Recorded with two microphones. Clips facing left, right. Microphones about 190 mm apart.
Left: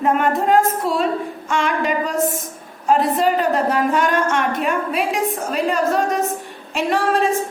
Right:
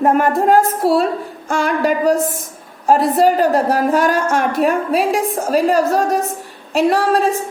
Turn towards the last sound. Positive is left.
turn(degrees=-35)  # may be behind; listen again after turning